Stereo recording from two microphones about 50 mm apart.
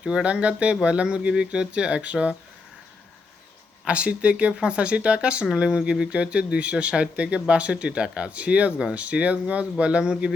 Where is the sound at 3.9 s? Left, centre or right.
Right.